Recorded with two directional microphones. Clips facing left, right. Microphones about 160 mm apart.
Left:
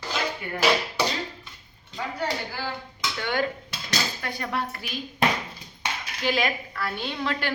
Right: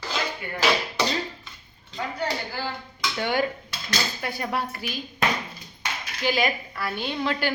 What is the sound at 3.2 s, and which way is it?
Dishes, 10° right (ahead or behind).